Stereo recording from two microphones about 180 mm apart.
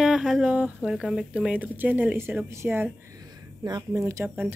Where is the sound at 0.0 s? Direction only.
5° right (ahead or behind).